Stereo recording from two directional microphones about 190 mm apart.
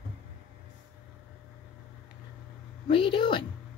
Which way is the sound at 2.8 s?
25° left (ahead or behind).